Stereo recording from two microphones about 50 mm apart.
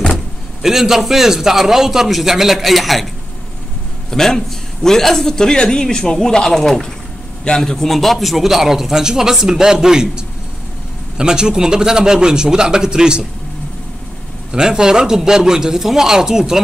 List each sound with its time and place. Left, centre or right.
0.1 s speech: centre
4.1 s a man's voice: centre
14.5 s speech: centre